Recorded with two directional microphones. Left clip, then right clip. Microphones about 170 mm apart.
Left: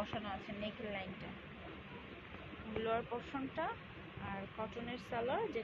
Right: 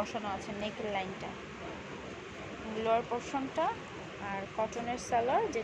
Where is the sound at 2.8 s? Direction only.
30° right (ahead or behind).